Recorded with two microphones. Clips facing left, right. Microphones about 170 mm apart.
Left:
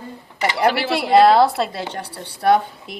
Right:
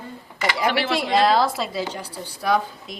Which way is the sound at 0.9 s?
60° left (ahead or behind).